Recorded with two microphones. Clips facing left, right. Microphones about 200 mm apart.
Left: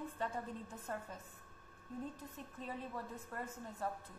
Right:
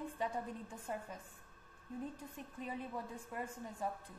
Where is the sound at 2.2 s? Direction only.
10° right (ahead or behind).